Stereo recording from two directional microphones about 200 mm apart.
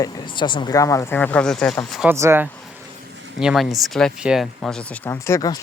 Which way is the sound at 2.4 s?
5° left (ahead or behind).